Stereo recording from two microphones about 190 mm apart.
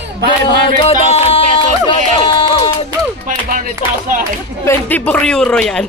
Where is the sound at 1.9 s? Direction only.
25° left (ahead or behind).